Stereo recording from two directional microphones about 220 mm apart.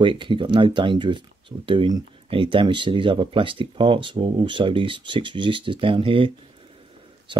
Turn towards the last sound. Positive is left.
turn(degrees=-25)  # may be behind; listen again after turning